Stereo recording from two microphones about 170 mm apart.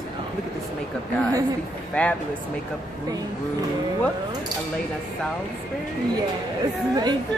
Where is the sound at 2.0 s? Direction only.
5° left (ahead or behind).